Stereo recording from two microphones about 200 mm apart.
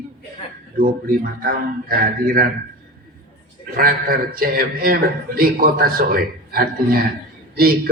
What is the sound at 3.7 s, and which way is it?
A man's voice, 45° right (ahead or behind).